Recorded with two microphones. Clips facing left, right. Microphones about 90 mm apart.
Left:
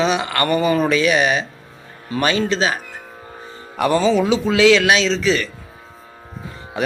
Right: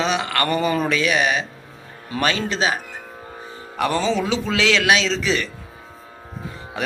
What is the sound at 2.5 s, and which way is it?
Speech, 15° right (ahead or behind).